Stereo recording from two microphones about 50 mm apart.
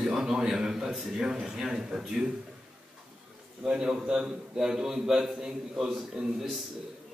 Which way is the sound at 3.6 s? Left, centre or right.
Centre.